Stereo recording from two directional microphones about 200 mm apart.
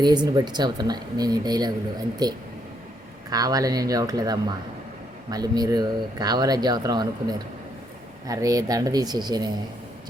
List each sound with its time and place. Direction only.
0.0 s speech: 20° right (ahead or behind)